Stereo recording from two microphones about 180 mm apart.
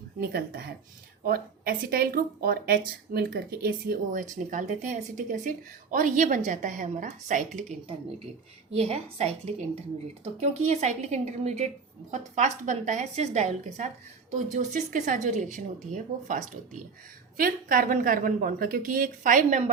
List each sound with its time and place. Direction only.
0.2 s a woman's voice: 60° right (ahead or behind); by 15.6 s 45° right (ahead or behind)
17.3 s speech: 50° right (ahead or behind)